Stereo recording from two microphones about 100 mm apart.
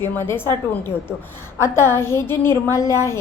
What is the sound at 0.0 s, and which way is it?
A woman's voice, 25° left (ahead or behind).